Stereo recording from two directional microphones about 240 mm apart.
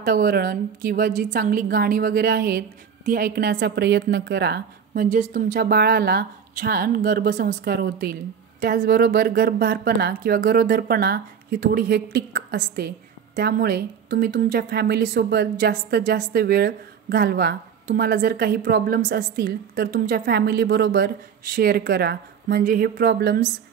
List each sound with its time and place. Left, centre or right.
0.0 s a woman's voice: right